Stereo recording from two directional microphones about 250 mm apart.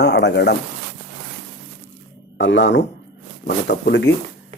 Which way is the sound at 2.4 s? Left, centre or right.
Left.